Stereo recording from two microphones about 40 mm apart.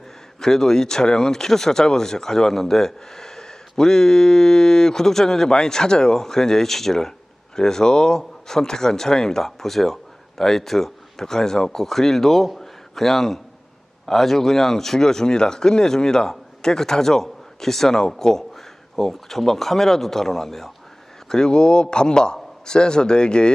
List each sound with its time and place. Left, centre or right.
0.3 s a man's voice: centre